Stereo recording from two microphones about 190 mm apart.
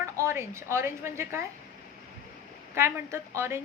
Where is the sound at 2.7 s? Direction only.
15° right (ahead or behind).